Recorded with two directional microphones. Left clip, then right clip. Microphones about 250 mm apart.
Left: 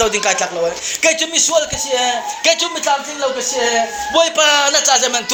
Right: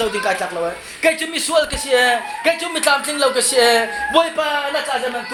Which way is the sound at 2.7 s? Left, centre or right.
Centre.